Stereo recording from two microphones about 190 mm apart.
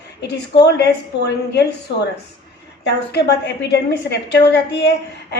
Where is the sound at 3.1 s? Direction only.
60° left (ahead or behind).